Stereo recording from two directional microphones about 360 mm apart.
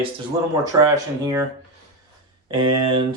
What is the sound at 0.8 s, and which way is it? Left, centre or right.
Speech, centre.